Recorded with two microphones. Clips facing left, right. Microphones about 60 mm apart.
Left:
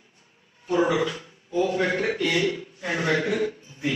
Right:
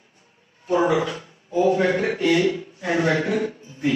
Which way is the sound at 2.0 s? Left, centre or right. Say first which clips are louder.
Right 4 dB; right.